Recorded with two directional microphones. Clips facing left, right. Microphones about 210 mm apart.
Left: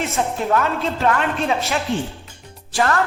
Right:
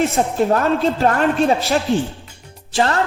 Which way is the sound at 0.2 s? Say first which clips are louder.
Right 3 dB; 35° right (ahead or behind).